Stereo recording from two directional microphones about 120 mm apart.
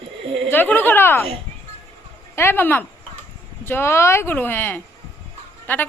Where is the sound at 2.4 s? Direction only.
20° left (ahead or behind).